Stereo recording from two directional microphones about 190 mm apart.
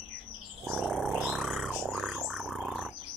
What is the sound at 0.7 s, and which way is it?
Roaring cats, 5° right (ahead or behind).